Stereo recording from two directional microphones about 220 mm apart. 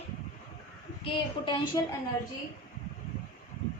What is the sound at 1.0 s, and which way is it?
Speech, 20° left (ahead or behind).